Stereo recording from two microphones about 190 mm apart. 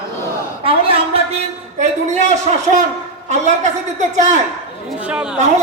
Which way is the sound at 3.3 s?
40° right (ahead or behind).